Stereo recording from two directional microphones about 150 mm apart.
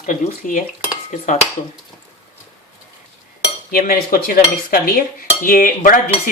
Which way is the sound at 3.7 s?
75° left (ahead or behind).